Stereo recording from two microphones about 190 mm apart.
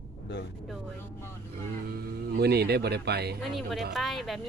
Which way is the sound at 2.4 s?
60° right (ahead or behind).